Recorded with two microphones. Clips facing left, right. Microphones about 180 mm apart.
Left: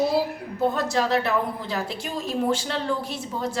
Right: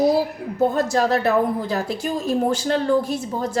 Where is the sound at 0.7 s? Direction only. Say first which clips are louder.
Right 4 dB; 45° right (ahead or behind).